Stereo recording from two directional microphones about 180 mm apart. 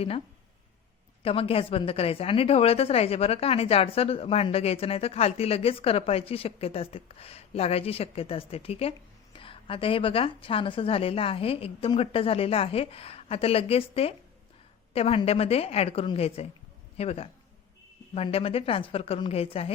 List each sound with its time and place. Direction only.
1.2 s a woman's voice: 30° left (ahead or behind)